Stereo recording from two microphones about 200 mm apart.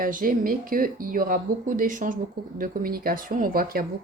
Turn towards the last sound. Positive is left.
turn(degrees=-45)  # may be behind; listen again after turning